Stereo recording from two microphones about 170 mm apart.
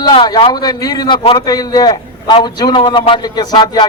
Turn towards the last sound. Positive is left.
turn(degrees=25)  # may be behind; listen again after turning